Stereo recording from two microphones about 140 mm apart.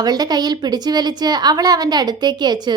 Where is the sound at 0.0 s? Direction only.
30° right (ahead or behind).